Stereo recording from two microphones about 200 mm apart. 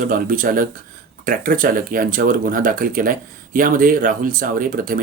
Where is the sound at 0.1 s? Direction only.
45° right (ahead or behind).